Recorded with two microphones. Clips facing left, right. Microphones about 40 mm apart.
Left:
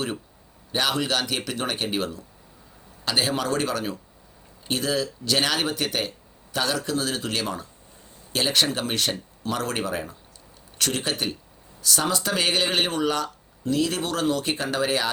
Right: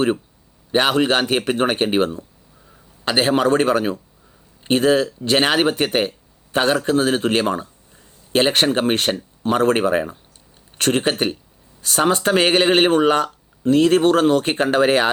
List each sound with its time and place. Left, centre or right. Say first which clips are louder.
0.7 s speech: right 8 dB; right